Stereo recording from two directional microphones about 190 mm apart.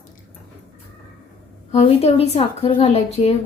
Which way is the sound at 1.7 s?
30° left (ahead or behind).